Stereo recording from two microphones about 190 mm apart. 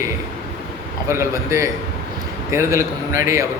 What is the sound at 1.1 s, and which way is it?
Speech, 15° right (ahead or behind).